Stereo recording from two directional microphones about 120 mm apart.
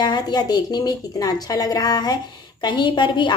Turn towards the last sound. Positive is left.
turn(degrees=40)  # may be behind; listen again after turning